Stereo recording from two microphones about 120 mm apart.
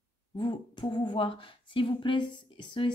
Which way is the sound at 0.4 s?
40° left (ahead or behind).